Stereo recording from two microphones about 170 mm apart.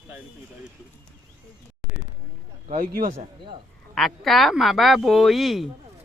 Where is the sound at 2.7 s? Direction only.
50° right (ahead or behind).